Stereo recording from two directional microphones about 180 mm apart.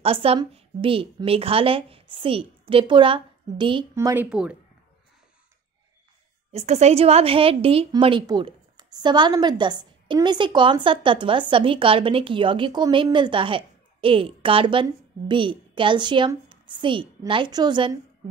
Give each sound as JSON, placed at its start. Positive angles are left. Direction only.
{"t": 0.0, "sound": "a woman's voice", "side_deg": -35}
{"t": 3.9, "sound": "speech", "side_deg": -15}
{"t": 6.5, "sound": "a woman's voice", "side_deg": -35}